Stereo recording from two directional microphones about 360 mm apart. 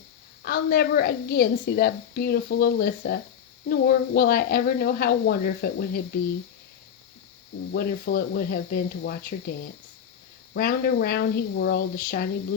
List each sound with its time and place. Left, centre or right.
0.4 s a woman's voice: left
7.7 s a woman's voice: left